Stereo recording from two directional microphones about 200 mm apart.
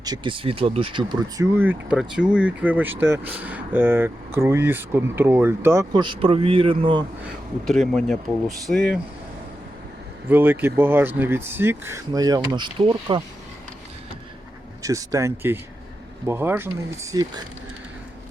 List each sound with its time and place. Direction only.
0.0 s speech: 20° right (ahead or behind)
1.5 s speech: 5° right (ahead or behind)
5.9 s speech: 25° right (ahead or behind)
7.7 s speech: centre (ahead or behind)
10.2 s speech: 10° right (ahead or behind); by 13.2 s 25° right (ahead or behind)
14.8 s speech: 15° right (ahead or behind)